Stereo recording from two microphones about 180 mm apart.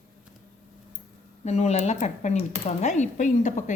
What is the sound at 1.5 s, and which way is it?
Speech, 35° left (ahead or behind).